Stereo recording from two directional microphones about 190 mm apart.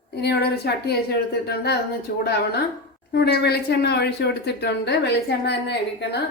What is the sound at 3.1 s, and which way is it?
Speech, 60° left (ahead or behind).